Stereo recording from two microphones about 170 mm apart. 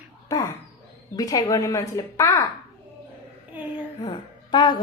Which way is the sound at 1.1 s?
20° left (ahead or behind).